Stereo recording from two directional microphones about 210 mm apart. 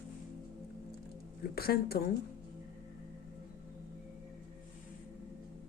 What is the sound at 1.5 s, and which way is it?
Speech, 45° left (ahead or behind).